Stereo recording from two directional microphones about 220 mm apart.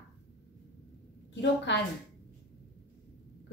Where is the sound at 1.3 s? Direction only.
50° left (ahead or behind).